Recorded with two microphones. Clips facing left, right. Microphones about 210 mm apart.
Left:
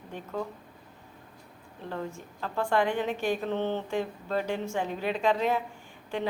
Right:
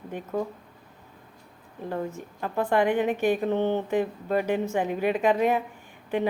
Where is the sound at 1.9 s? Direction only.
20° right (ahead or behind).